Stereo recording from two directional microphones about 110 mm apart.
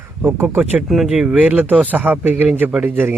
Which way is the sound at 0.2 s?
15° right (ahead or behind).